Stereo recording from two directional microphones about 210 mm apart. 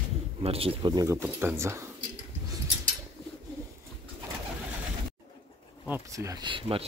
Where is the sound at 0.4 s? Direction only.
25° right (ahead or behind); by 1.9 s 10° right (ahead or behind).